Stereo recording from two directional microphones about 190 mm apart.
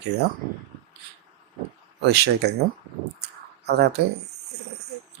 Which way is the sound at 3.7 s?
60° right (ahead or behind).